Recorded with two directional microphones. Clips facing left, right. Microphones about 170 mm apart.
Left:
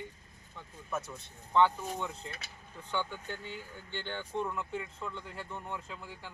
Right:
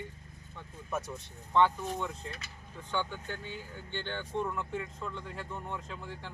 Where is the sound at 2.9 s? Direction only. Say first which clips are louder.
Right 1 dB; 10° left (ahead or behind).